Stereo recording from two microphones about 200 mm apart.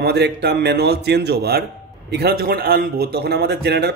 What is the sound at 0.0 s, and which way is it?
A man's voice, 55° right (ahead or behind).